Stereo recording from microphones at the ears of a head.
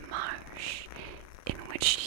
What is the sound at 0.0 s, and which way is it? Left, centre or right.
Whispering, right.